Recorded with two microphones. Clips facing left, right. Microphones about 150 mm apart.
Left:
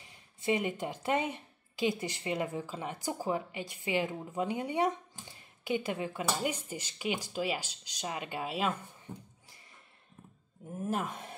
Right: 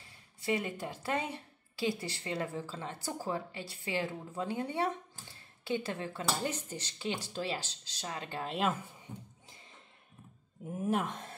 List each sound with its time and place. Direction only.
0.0 s a woman's voice: 20° left (ahead or behind); by 8.8 s centre (ahead or behind)
10.7 s speech: centre (ahead or behind)